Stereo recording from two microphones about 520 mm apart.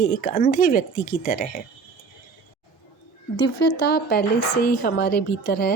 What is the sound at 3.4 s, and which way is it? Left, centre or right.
A woman's voice, centre.